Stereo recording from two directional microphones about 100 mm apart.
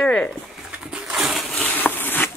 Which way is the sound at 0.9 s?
5° right (ahead or behind).